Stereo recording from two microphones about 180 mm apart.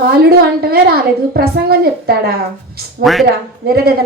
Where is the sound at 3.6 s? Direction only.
60° right (ahead or behind).